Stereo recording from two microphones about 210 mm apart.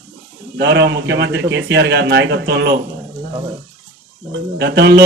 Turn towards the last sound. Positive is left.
turn(degrees=-50)  # may be behind; listen again after turning